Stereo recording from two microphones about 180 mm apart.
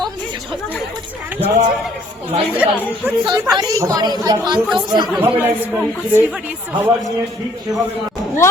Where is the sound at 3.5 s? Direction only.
20° right (ahead or behind).